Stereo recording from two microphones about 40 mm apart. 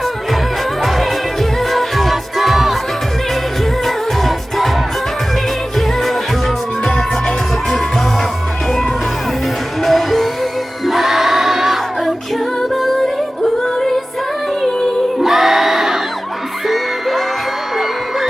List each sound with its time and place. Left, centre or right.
0.8 s music: centre
3.8 s music: centre
6.8 s music: centre
9.8 s music: centre
12.7 s music: centre
15.2 s crowd: centre
16.6 s music: centre